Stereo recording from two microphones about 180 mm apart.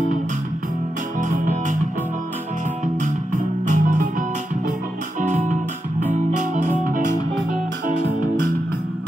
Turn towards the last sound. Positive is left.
turn(degrees=-50)  # may be behind; listen again after turning